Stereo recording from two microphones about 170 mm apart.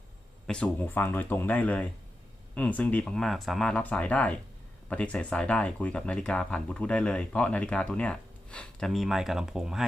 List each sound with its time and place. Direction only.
0.4 s speech: 5° left (ahead or behind)